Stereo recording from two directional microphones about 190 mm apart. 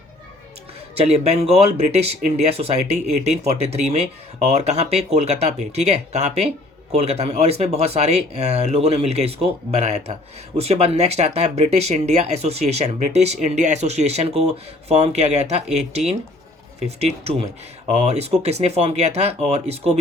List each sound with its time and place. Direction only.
0.9 s speech: 35° right (ahead or behind)